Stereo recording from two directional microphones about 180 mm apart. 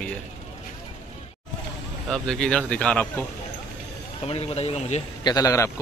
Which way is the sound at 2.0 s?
5° left (ahead or behind).